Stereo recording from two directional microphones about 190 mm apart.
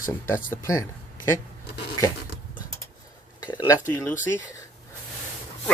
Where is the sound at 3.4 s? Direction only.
20° left (ahead or behind).